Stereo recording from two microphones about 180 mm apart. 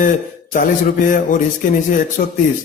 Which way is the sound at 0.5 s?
45° left (ahead or behind).